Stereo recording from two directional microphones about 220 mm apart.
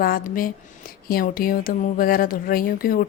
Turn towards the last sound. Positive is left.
turn(degrees=40)  # may be behind; listen again after turning